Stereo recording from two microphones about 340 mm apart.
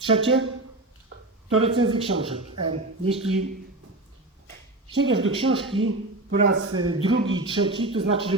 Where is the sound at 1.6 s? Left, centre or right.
Centre.